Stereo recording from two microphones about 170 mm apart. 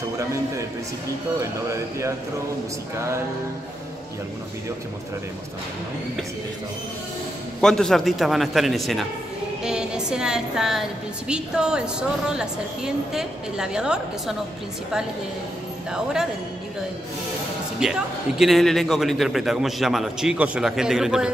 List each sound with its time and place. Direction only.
1.4 s speech: 15° right (ahead or behind)
7.6 s a woman's voice: 5° left (ahead or behind)
15.9 s a woman's voice: 5° right (ahead or behind)
17.7 s a woman's voice: 5° right (ahead or behind)